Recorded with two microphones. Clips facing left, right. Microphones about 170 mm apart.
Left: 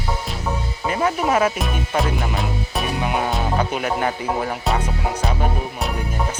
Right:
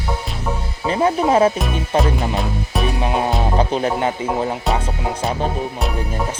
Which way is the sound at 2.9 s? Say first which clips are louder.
Right 1 dB; 25° right (ahead or behind).